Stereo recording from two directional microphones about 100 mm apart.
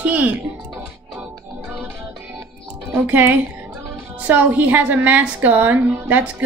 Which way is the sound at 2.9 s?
20° right (ahead or behind).